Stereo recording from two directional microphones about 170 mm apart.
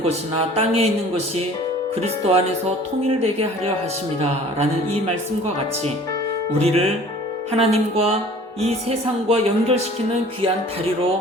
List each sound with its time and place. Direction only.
0.1 s speech: 35° right (ahead or behind)
2.0 s speech: 40° right (ahead or behind)
6.6 s speech: 35° right (ahead or behind)